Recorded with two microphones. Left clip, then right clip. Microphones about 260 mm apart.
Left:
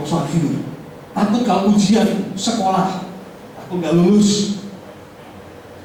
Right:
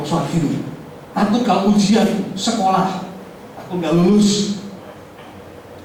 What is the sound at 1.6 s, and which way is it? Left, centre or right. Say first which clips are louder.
Speech: even; left.